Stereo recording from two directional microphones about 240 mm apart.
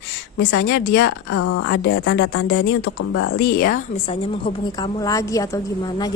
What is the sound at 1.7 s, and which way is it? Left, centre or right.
Speech, left.